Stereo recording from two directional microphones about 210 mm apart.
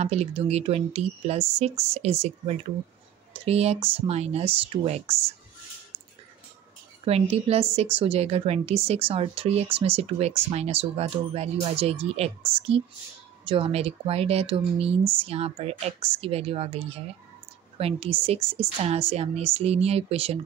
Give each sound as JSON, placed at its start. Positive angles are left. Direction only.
{"t": 0.0, "sound": "a woman's voice", "side_deg": -30}
{"t": 7.1, "sound": "a woman's voice", "side_deg": -30}